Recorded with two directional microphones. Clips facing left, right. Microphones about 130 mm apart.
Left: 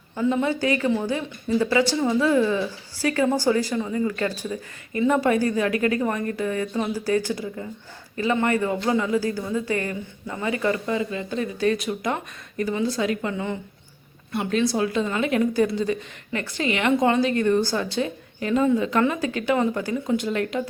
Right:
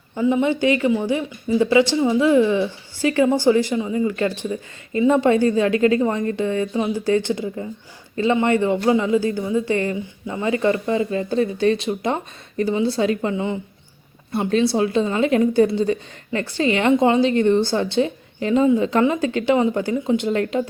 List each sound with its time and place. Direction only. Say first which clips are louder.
0.2 s speech: right 4 dB; 15° right (ahead or behind); by 13.3 s 30° right (ahead or behind)
13.3 s speech: right 5 dB; 20° right (ahead or behind)
14.3 s speech: right 4 dB; 30° right (ahead or behind)